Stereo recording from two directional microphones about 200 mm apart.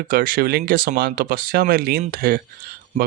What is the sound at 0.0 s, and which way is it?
Speech, 45° right (ahead or behind).